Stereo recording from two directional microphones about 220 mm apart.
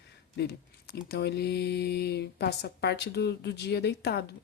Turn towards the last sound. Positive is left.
turn(degrees=50)  # may be behind; listen again after turning